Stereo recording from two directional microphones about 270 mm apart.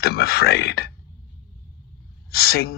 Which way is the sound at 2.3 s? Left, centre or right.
Left.